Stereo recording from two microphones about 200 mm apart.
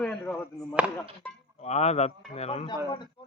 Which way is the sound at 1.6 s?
35° left (ahead or behind).